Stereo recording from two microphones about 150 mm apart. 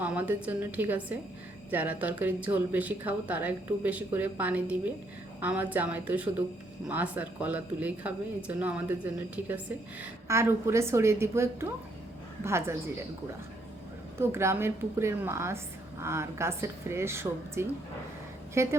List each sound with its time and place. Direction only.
0.0 s speech: 10° right (ahead or behind)
14.2 s a woman's voice: 15° right (ahead or behind)